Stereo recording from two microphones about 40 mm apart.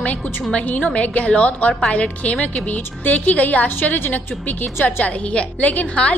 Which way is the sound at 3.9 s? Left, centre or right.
Left.